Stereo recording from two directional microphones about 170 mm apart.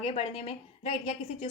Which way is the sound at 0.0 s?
40° left (ahead or behind).